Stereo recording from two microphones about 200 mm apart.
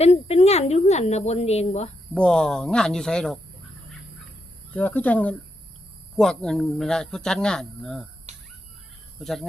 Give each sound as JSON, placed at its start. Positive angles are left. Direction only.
{"t": 0.0, "sound": "speech", "side_deg": 30}
{"t": 2.1, "sound": "speech", "side_deg": 5}
{"t": 4.7, "sound": "speech", "side_deg": 10}
{"t": 8.3, "sound": "bird", "side_deg": -35}
{"t": 9.1, "sound": "speech", "side_deg": 0}